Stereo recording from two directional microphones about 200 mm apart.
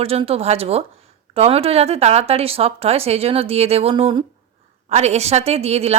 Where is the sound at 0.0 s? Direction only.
30° right (ahead or behind).